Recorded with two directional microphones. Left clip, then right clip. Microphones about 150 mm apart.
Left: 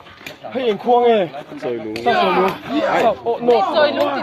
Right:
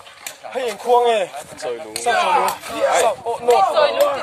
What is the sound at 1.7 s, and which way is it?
Speech, 15° right (ahead or behind).